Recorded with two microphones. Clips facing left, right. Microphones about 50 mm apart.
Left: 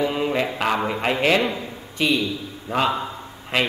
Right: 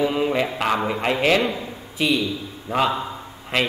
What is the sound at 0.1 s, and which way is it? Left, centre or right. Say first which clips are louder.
A man's voice: right 1 dB; centre.